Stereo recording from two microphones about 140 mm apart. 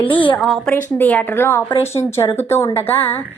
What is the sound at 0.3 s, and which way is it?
Speech, centre (ahead or behind).